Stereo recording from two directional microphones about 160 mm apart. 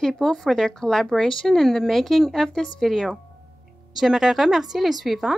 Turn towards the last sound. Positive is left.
turn(degrees=0)  # may be behind; listen again after turning